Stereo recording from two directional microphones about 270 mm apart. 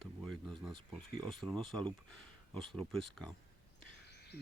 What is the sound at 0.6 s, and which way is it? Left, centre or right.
Speech, centre.